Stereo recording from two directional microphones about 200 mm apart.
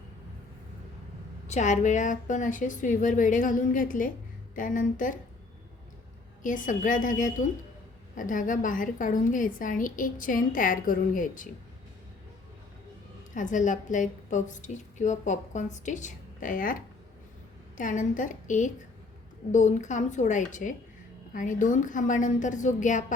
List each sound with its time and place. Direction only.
1.5 s a woman's voice: 35° left (ahead or behind)
6.4 s a woman's voice: 40° left (ahead or behind)
13.3 s a woman's voice: 40° left (ahead or behind)
17.7 s a woman's voice: 40° left (ahead or behind)